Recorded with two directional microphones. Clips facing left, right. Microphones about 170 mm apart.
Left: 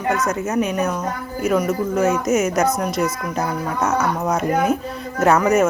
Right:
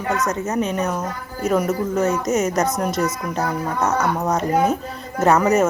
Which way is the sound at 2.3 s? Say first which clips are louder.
Left 1 dB; 35° right (ahead or behind).